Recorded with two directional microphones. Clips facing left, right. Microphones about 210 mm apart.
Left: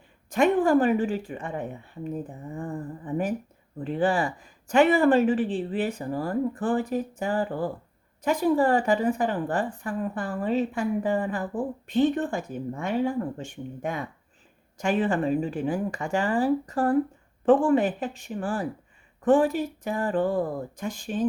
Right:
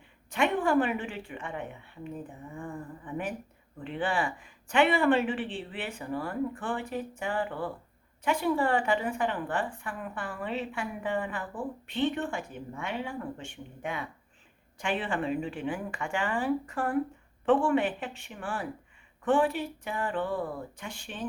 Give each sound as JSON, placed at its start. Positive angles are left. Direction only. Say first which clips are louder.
{"t": 0.3, "sound": "a woman's voice", "louder": "left 6 dB", "side_deg": 40}